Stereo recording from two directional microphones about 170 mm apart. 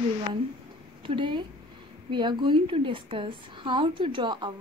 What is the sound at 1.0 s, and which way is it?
A woman's voice, 30° right (ahead or behind).